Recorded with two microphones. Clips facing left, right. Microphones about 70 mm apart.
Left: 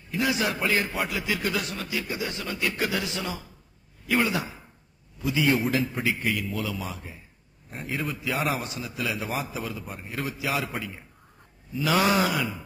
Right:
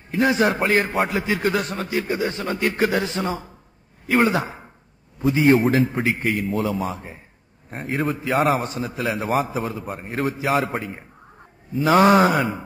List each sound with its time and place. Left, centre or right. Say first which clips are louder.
0.1 s a man's voice: right 7 dB; right